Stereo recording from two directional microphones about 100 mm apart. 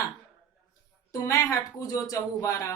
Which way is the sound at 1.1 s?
35° left (ahead or behind).